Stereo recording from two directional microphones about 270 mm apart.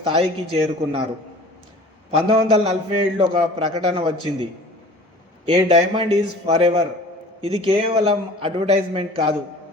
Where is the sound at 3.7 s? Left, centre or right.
Right.